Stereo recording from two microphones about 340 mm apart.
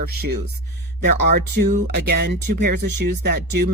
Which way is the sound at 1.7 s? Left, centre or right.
Right.